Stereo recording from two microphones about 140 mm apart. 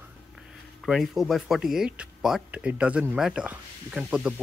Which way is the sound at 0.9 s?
Centre (ahead or behind).